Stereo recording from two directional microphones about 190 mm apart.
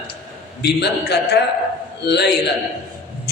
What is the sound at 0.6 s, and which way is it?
A man's voice, 60° left (ahead or behind).